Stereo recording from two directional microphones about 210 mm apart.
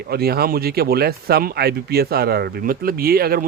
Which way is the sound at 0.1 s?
50° right (ahead or behind).